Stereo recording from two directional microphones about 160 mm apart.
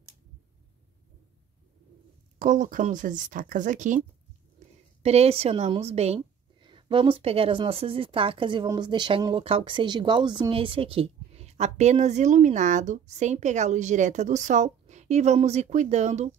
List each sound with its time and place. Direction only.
2.3 s speech: 55° right (ahead or behind)
5.0 s a woman's voice: 40° right (ahead or behind)